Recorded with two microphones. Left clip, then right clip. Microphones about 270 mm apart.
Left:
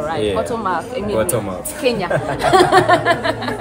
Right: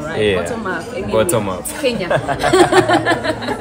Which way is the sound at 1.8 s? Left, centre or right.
Centre.